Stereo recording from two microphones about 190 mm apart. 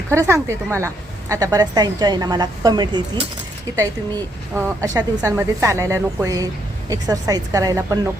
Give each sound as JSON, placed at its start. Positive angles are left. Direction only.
{"t": 0.1, "sound": "a woman's voice", "side_deg": -15}